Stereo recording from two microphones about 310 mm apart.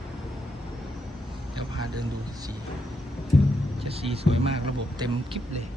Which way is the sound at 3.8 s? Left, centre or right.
Centre.